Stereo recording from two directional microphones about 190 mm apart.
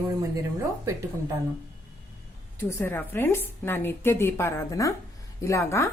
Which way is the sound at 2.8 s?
10° left (ahead or behind).